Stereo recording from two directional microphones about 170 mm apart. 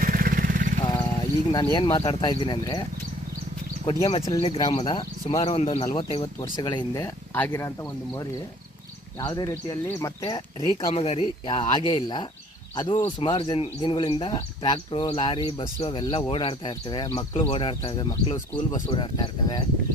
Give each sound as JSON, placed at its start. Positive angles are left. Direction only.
{"t": 0.0, "sound": "vehicle", "side_deg": -60}
{"t": 0.8, "sound": "a sound", "side_deg": 25}
{"t": 1.5, "sound": "speech", "side_deg": 25}
{"t": 4.0, "sound": "speech", "side_deg": 35}
{"t": 7.3, "sound": "speech", "side_deg": 10}
{"t": 10.8, "sound": "speech", "side_deg": 35}